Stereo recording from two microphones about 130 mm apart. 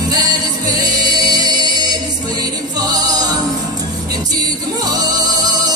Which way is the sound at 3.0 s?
30° right (ahead or behind).